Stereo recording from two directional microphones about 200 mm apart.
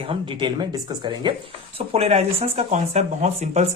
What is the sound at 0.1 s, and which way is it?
Speech, 25° right (ahead or behind).